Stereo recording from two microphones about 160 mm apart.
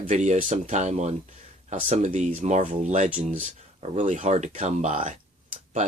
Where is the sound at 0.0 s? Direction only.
45° right (ahead or behind).